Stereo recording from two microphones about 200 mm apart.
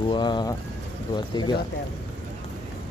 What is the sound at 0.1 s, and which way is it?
Speech, 20° left (ahead or behind).